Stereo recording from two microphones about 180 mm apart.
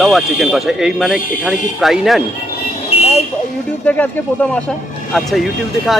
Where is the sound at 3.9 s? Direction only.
10° left (ahead or behind).